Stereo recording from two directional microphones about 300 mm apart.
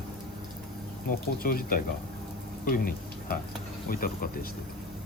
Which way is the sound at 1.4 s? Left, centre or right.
Left.